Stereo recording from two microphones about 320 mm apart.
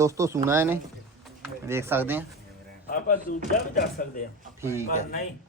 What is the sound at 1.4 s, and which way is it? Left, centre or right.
Speech, centre.